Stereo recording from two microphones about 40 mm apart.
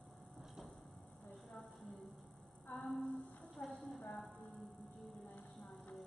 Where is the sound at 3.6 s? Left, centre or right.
Left.